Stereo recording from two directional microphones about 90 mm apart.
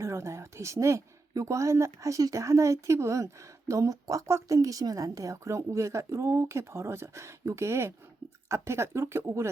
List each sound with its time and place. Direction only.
0.0 s speech: 30° right (ahead or behind)